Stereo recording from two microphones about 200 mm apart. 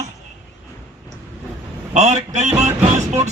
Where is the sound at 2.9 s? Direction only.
35° right (ahead or behind).